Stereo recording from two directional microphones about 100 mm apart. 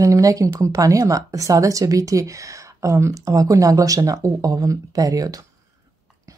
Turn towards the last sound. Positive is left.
turn(degrees=-35)  # may be behind; listen again after turning